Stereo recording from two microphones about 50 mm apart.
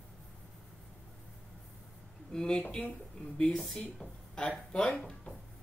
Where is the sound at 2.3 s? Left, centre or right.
Centre.